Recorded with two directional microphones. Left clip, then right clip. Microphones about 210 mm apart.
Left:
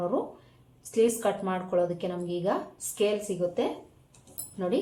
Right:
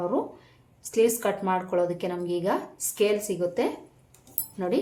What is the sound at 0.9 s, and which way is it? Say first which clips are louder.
Speech: right 2 dB; 15° right (ahead or behind).